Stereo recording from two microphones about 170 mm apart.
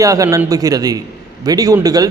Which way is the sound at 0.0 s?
20° right (ahead or behind).